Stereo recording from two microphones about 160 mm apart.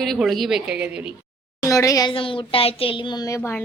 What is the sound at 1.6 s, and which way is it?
Speech, 20° left (ahead or behind).